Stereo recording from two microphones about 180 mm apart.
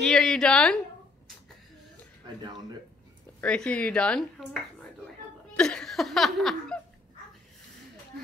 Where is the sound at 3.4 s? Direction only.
5° left (ahead or behind).